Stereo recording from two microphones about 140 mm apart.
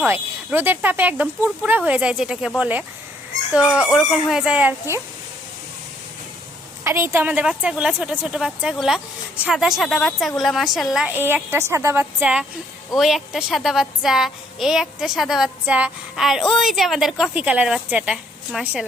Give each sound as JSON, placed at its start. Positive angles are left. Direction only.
{"t": 0.1, "sound": "speech", "side_deg": -15}
{"t": 3.8, "sound": "a woman's voice", "side_deg": -5}
{"t": 6.8, "sound": "a woman's voice", "side_deg": -15}
{"t": 11.1, "sound": "a woman's voice", "side_deg": -15}